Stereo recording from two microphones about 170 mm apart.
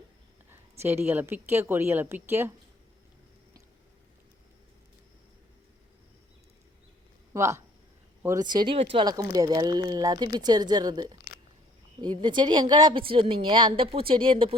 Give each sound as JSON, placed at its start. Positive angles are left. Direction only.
{"t": 0.5, "sound": "a woman's voice", "side_deg": -15}
{"t": 7.3, "sound": "a woman's voice", "side_deg": -15}
{"t": 9.0, "sound": "a woman's voice", "side_deg": -20}